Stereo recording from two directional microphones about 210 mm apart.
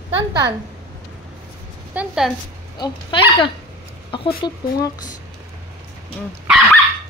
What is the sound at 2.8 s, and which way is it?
A woman's voice, 25° left (ahead or behind).